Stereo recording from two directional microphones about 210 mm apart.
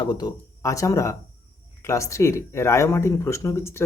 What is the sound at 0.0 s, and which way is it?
Speech, 20° left (ahead or behind).